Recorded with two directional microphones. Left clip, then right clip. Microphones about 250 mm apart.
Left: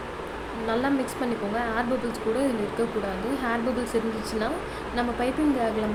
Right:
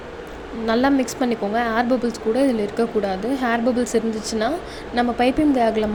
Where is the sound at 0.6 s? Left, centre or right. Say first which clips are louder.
Right 7 dB; right.